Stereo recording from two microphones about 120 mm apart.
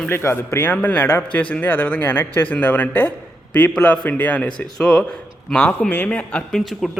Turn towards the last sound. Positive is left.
turn(degrees=0)  # may be behind; listen again after turning